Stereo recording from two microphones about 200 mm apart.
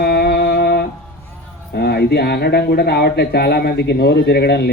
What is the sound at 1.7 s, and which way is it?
Speech, 55° left (ahead or behind).